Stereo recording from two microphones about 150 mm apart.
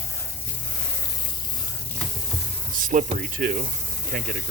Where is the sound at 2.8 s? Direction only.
65° right (ahead or behind).